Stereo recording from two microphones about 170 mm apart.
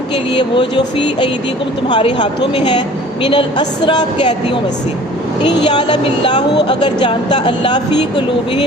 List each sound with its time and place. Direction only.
0.3 s a woman's voice: 30° left (ahead or behind)
5.6 s a woman's voice: 25° left (ahead or behind)